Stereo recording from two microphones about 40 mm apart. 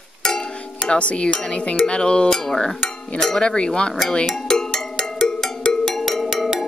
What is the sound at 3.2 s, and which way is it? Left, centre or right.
Speech, left.